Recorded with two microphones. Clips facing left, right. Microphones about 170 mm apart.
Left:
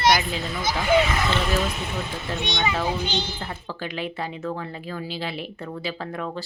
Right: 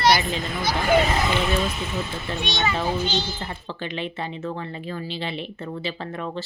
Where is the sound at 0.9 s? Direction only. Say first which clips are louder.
Even; 45° right (ahead or behind).